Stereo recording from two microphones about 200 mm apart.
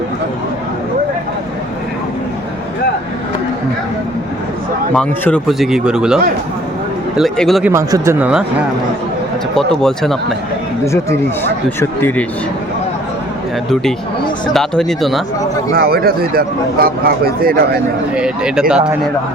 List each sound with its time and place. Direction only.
4.9 s speech: 5° left (ahead or behind)
7.2 s speech: centre (ahead or behind)
7.7 s speech: 15° right (ahead or behind)
8.2 s speech: 5° right (ahead or behind)
9.8 s speech: centre (ahead or behind)
11.8 s speech: 10° left (ahead or behind)
14.5 s speech: centre (ahead or behind)
15.7 s speech: 50° right (ahead or behind)
18.1 s speech: 5° right (ahead or behind)